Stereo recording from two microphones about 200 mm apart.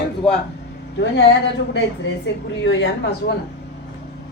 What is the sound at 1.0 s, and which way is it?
A woman's voice, 60° left (ahead or behind).